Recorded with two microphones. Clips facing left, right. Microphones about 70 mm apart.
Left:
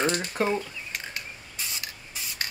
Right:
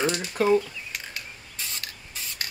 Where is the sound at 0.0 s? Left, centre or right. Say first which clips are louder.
Right 2 dB; left.